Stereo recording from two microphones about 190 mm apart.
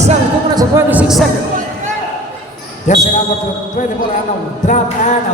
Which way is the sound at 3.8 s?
45° left (ahead or behind).